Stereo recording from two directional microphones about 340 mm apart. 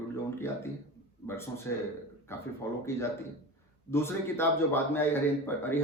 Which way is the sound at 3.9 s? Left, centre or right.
Centre.